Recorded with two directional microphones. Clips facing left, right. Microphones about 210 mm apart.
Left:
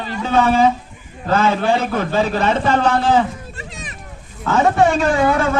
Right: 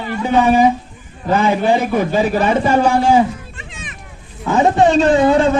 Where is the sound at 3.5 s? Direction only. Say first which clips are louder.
Left 2 dB; 40° left (ahead or behind).